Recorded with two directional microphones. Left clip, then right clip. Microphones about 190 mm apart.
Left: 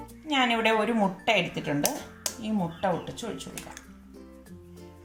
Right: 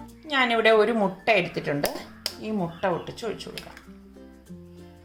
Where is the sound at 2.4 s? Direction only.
25° right (ahead or behind).